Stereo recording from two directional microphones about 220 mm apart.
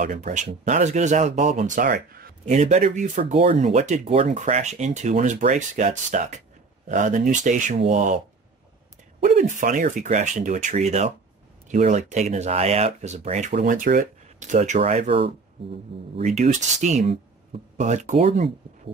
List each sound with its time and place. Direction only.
0.0 s speech: 35° right (ahead or behind)
9.2 s speech: 35° right (ahead or behind)